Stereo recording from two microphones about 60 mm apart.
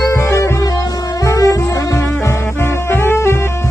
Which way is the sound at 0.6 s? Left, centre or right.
Left.